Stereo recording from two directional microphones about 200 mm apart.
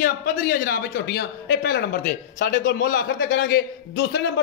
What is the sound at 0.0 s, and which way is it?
A man's voice, 45° left (ahead or behind).